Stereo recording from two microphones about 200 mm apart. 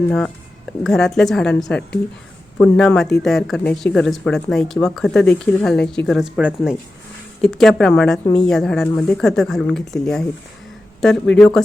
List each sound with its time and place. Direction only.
0.1 s speech: 5° left (ahead or behind)